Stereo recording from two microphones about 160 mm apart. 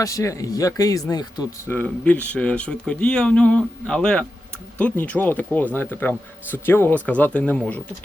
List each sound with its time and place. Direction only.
0.0 s speech: 20° left (ahead or behind)
1.7 s speech: 10° left (ahead or behind)